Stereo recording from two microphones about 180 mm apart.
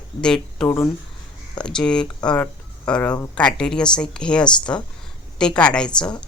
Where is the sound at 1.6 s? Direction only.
5° left (ahead or behind).